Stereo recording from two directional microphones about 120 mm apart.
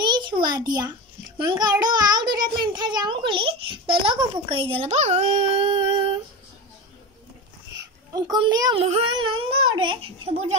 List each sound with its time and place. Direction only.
0.0 s a sound: 40° right (ahead or behind)
1.4 s a child's voice: 35° right (ahead or behind); by 6.1 s 50° right (ahead or behind)
8.1 s a child's voice: 35° right (ahead or behind)
8.8 s speech: 55° right (ahead or behind)